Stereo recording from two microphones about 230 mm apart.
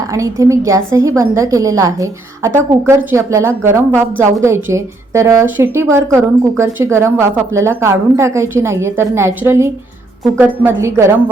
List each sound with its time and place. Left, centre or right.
0.1 s a woman's voice: centre